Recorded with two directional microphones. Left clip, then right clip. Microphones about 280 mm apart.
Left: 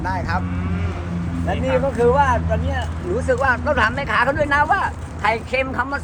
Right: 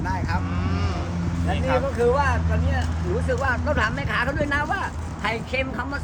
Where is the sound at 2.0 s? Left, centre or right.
Left.